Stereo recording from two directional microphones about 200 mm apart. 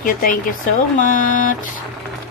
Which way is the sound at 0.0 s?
45° left (ahead or behind).